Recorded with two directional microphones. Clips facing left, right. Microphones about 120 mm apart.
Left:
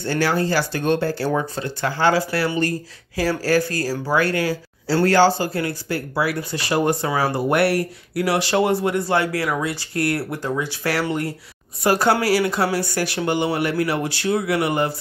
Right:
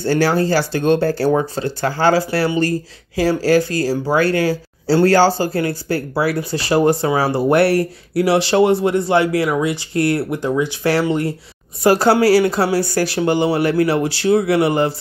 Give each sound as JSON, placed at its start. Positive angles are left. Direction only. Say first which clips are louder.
{"t": 0.0, "sound": "speech", "louder": "right 5 dB", "side_deg": -35}
{"t": 1.0, "sound": "speech", "louder": "right 5 dB", "side_deg": -40}